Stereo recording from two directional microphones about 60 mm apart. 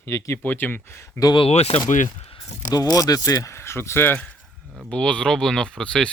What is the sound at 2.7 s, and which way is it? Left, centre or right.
Speech, left.